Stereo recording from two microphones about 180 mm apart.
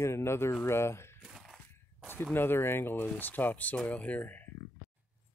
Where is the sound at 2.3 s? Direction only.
10° left (ahead or behind).